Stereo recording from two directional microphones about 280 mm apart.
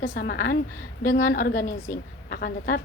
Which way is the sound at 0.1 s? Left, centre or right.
Left.